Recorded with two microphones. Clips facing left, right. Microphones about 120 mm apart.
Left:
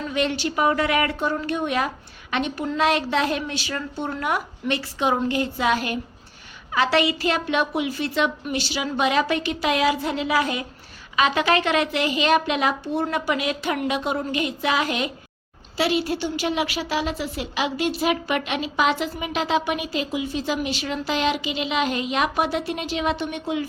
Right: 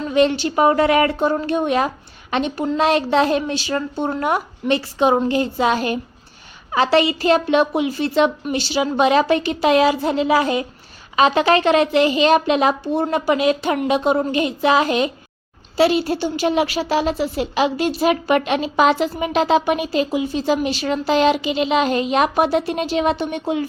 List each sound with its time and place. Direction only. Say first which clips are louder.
0.1 s a woman's voice: right 9 dB; 30° right (ahead or behind)